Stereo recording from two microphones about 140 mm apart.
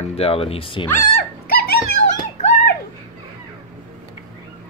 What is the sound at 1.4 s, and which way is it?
Dog, 90° left.